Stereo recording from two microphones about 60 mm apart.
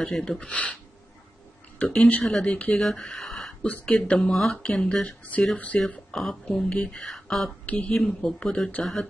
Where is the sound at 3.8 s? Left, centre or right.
Centre.